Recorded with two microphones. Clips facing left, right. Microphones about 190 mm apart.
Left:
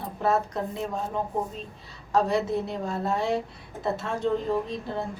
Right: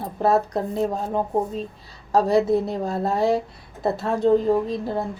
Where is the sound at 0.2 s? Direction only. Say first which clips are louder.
Right 5 dB; 35° right (ahead or behind).